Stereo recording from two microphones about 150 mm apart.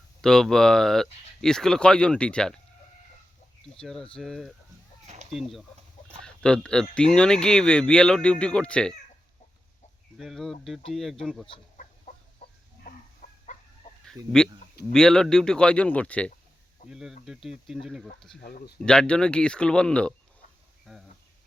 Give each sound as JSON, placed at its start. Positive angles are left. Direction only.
{"t": 0.2, "sound": "speech", "side_deg": 5}
{"t": 3.8, "sound": "speech", "side_deg": 5}
{"t": 10.2, "sound": "speech", "side_deg": 0}
{"t": 12.1, "sound": "chicken", "side_deg": 55}
{"t": 13.2, "sound": "chicken", "side_deg": 65}
{"t": 14.2, "sound": "speech", "side_deg": -25}
{"t": 14.9, "sound": "speech", "side_deg": 5}
{"t": 16.9, "sound": "speech", "side_deg": -5}
{"t": 18.4, "sound": "speech", "side_deg": 85}
{"t": 18.9, "sound": "speech", "side_deg": 5}